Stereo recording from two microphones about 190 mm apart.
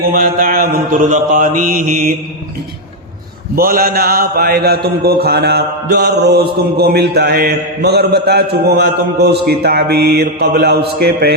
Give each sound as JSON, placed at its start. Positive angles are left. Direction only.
{"t": 0.1, "sound": "mantra", "side_deg": -50}
{"t": 3.5, "sound": "a man's voice", "side_deg": -50}